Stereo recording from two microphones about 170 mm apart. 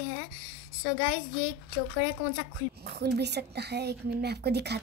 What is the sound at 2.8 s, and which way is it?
A woman's voice, 75° right (ahead or behind).